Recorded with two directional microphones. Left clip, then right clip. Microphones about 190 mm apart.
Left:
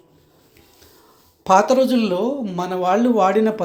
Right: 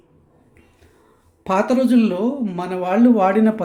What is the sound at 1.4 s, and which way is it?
Speech, 10° right (ahead or behind).